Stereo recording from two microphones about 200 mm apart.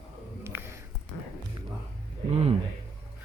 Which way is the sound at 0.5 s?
10° right (ahead or behind).